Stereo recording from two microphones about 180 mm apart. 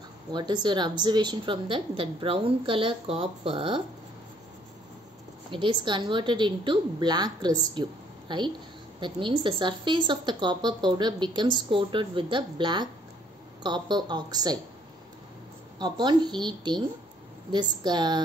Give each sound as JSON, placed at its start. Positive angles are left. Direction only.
{"t": 0.3, "sound": "a woman's voice", "side_deg": -25}
{"t": 5.5, "sound": "a woman's voice", "side_deg": -25}
{"t": 15.8, "sound": "a woman's voice", "side_deg": -25}